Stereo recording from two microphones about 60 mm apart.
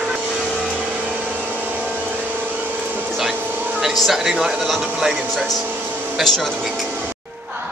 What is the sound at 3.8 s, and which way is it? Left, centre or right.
Speech, centre.